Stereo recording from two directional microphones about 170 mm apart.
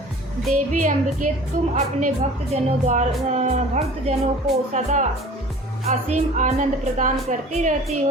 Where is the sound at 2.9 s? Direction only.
45° right (ahead or behind).